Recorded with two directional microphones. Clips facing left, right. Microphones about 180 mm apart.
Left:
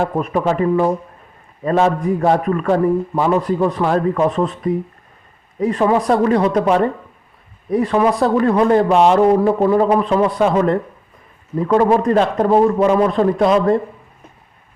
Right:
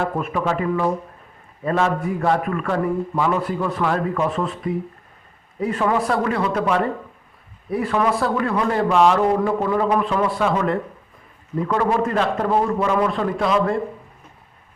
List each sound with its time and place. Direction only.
0.0 s a man's voice: 35° left (ahead or behind)
7.9 s speech: 25° left (ahead or behind)
8.2 s a man's voice: 35° left (ahead or behind)